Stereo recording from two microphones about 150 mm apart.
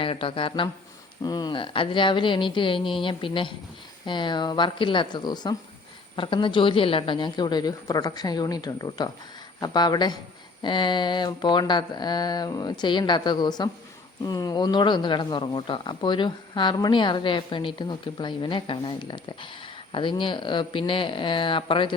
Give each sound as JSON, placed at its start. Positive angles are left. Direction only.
{"t": 0.0, "sound": "speech", "side_deg": 35}
{"t": 6.1, "sound": "a sound", "side_deg": 35}
{"t": 14.3, "sound": "speech", "side_deg": 25}